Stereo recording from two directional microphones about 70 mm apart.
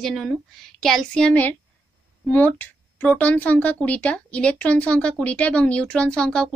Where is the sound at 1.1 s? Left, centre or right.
Centre.